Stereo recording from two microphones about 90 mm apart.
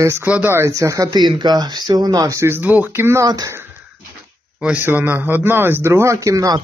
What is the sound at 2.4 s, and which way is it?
Speech, 30° right (ahead or behind).